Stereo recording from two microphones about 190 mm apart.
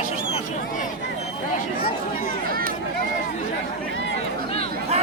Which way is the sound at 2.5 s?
50° right (ahead or behind).